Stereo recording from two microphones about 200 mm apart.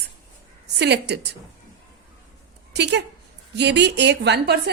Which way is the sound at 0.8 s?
60° right (ahead or behind).